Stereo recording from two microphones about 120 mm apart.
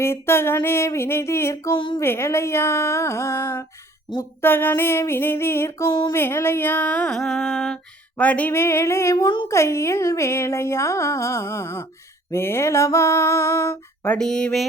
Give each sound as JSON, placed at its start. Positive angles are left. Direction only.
{"t": 0.0, "sound": "speech", "side_deg": 20}
{"t": 1.7, "sound": "a sound", "side_deg": 40}
{"t": 2.0, "sound": "speech", "side_deg": 20}
{"t": 5.9, "sound": "a sound", "side_deg": 35}
{"t": 6.1, "sound": "music", "side_deg": 20}
{"t": 8.2, "sound": "speech", "side_deg": 10}
{"t": 9.2, "sound": "speech", "side_deg": 45}
{"t": 9.5, "sound": "speech", "side_deg": 25}
{"t": 14.2, "sound": "speech", "side_deg": 5}